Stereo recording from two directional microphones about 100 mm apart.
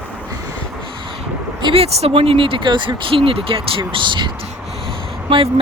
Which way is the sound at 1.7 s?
75° right (ahead or behind).